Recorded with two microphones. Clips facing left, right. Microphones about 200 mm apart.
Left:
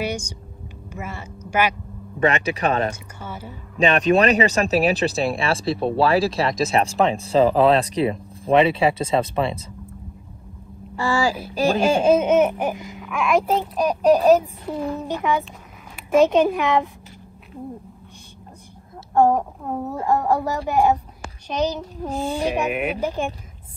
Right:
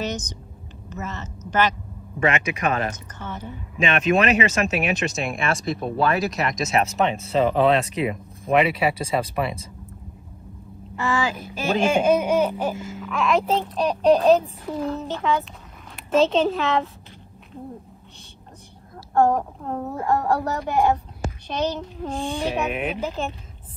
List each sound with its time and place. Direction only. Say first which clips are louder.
0.0 s a woman's voice: left 2 dB; 10° left (ahead or behind)
2.1 s speech: left 2 dB; 35° left (ahead or behind)
3.2 s speech: right 1 dB; 10° left (ahead or behind)
3.8 s speech: left 3 dB; 35° left (ahead or behind)
11.0 s a sound: left 3 dB; 35° left (ahead or behind)
11.5 s speech: left 2 dB; 35° left (ahead or behind); by 16.9 s 15° left (ahead or behind)
19.1 s speech: left 2 dB; 10° left (ahead or behind)